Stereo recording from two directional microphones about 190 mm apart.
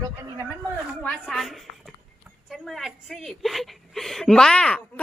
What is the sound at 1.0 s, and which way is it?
A woman's voice, centre (ahead or behind).